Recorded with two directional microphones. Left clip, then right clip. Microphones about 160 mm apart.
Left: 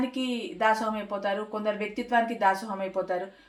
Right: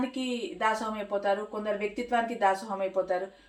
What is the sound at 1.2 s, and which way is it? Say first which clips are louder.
Speech: left 1 dB; 35° left (ahead or behind).